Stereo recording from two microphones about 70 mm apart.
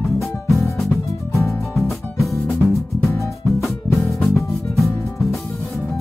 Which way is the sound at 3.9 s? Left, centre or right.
Left.